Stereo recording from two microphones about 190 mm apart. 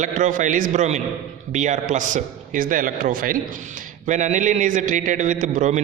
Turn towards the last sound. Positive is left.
turn(degrees=-40)  # may be behind; listen again after turning